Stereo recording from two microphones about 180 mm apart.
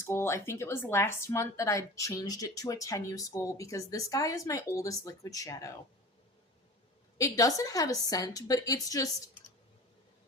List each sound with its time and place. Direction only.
0.0 s speech: 15° left (ahead or behind)
7.2 s a woman's voice: 20° left (ahead or behind)